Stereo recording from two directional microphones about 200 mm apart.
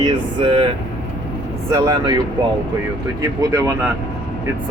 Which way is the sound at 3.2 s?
15° right (ahead or behind).